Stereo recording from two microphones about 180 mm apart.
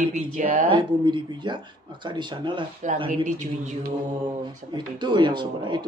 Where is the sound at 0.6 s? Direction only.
25° right (ahead or behind).